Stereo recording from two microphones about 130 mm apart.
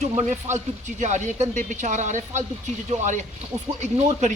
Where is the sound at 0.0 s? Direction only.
60° right (ahead or behind).